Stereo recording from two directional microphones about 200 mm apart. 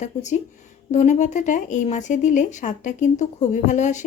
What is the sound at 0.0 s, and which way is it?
Speech, 35° left (ahead or behind).